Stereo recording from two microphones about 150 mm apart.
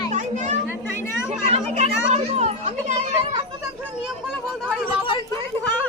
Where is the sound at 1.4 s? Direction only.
45° right (ahead or behind).